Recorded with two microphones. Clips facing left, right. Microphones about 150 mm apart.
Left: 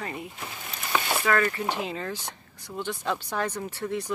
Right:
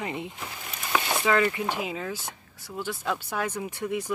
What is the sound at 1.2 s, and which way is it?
Speech, 15° right (ahead or behind).